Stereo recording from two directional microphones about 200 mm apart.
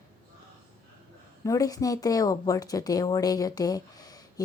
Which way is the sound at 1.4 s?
15° left (ahead or behind).